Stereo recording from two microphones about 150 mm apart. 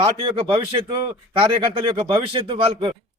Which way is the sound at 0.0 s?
35° right (ahead or behind).